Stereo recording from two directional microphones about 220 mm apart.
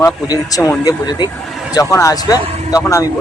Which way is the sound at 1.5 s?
Centre (ahead or behind).